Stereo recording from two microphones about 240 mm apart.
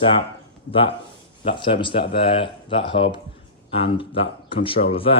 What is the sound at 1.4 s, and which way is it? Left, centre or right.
Speech, left.